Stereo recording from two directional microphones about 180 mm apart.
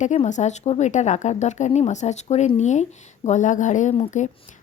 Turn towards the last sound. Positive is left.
turn(degrees=40)  # may be behind; listen again after turning